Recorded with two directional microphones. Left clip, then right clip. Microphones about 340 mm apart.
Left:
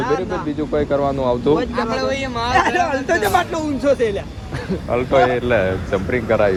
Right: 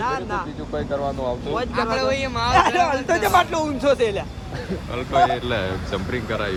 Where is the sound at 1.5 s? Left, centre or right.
Centre.